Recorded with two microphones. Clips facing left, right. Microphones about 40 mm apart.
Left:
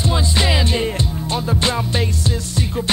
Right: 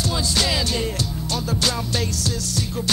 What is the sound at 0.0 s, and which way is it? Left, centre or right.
Music, left.